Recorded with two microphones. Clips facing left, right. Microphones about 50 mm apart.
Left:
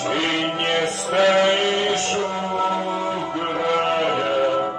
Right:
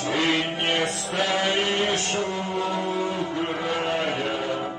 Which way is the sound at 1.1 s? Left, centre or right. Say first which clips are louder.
Left 10 dB; left.